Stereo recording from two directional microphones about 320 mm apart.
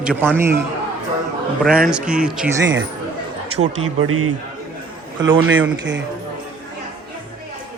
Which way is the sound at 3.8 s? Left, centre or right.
Right.